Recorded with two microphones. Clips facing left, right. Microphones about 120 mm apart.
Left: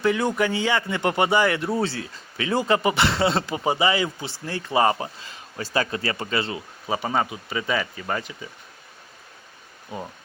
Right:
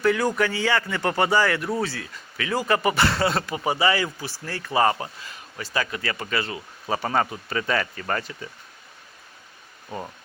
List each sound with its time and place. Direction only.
0.0 s speech: 20° left (ahead or behind)
6.8 s speech: 15° left (ahead or behind)